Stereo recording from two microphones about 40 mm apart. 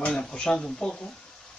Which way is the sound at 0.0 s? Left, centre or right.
Left.